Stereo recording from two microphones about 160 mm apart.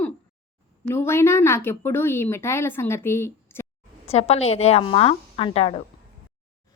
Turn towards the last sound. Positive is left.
turn(degrees=35)  # may be behind; listen again after turning